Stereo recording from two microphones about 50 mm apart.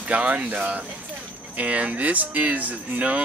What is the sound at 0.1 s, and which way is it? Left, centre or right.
Speech, right.